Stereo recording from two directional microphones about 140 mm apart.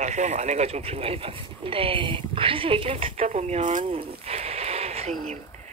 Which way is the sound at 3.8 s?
40° right (ahead or behind).